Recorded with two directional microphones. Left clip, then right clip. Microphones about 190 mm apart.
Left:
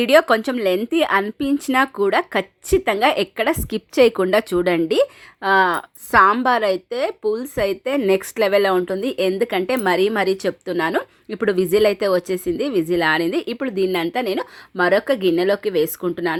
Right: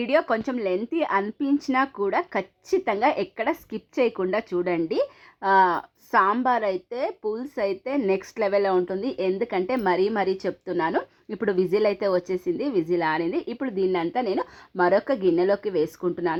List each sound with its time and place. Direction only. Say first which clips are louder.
0.0 s speech: left 8 dB; 35° left (ahead or behind)